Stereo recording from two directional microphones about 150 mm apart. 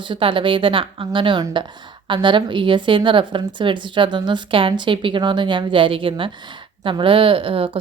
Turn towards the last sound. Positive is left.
turn(degrees=-35)  # may be behind; listen again after turning